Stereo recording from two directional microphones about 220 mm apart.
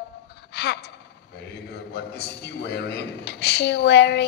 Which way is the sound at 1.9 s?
50° left (ahead or behind).